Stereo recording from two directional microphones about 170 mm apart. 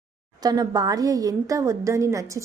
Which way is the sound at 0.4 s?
25° right (ahead or behind).